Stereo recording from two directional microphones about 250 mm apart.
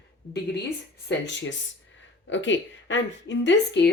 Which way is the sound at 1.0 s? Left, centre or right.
Left.